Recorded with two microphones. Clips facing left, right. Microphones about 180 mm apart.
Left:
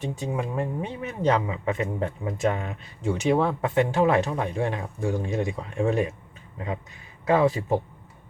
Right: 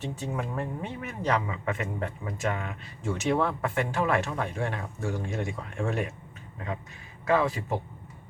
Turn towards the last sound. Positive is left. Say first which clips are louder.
# left 4 dB
turn(degrees=20)  # may be behind; listen again after turning